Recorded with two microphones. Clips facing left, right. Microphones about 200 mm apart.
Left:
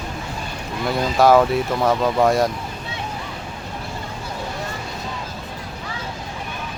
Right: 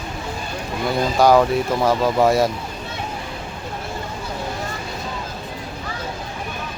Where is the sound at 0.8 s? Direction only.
Centre (ahead or behind).